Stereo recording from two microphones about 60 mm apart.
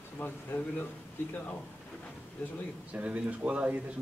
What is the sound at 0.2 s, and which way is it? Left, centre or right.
Speech, left.